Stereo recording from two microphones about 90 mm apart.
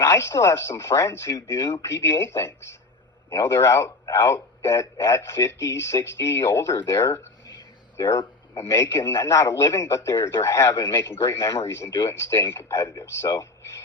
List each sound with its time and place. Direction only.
0.0 s a man's voice: 30° left (ahead or behind)
10.7 s speech: 50° left (ahead or behind)
10.9 s speech: 30° left (ahead or behind)
12.7 s speech: 45° left (ahead or behind)
13.1 s speech: 30° left (ahead or behind)